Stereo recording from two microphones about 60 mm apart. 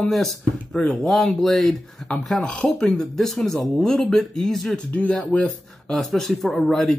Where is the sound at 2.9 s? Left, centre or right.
Centre.